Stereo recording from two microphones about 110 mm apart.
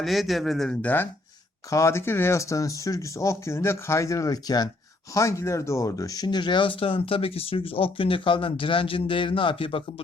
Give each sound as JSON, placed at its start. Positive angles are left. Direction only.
{"t": 0.0, "sound": "speech", "side_deg": 0}
{"t": 1.7, "sound": "speech", "side_deg": 25}